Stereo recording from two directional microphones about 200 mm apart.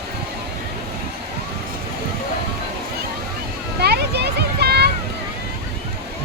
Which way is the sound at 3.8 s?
55° right (ahead or behind).